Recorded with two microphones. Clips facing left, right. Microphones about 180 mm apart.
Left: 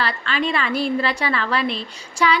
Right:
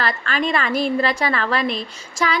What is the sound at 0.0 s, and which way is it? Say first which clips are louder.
A woman's voice: right 1 dB; 45° right (ahead or behind).